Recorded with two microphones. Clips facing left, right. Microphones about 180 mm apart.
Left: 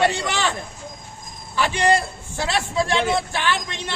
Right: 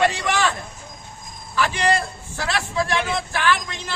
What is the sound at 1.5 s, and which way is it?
A man's voice, 25° left (ahead or behind).